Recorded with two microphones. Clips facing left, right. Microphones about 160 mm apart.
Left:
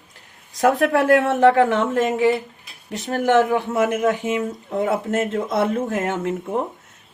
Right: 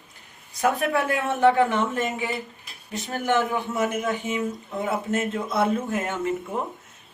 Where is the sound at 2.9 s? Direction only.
75° left (ahead or behind).